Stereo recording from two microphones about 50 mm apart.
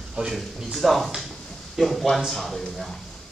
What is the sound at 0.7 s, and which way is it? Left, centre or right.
Speech, centre.